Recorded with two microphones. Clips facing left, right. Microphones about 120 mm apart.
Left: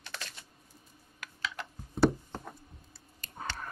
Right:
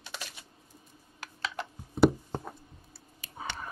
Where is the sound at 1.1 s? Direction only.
35° right (ahead or behind).